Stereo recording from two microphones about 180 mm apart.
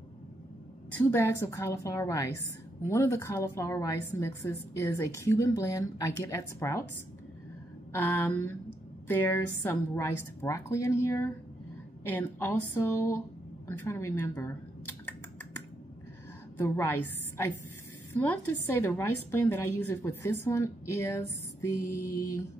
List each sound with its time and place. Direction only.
0.9 s a woman's voice: 15° left (ahead or behind)
7.9 s a woman's voice: 10° left (ahead or behind)
16.5 s a woman's voice: 15° left (ahead or behind)